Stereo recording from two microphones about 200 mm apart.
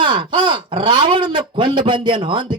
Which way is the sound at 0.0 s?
25° right (ahead or behind).